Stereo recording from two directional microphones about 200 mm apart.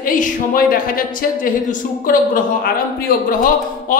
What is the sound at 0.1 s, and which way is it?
A woman's voice, 45° left (ahead or behind).